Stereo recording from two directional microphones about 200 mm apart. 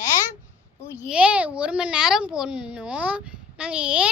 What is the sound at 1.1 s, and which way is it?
A child's voice, 5° right (ahead or behind).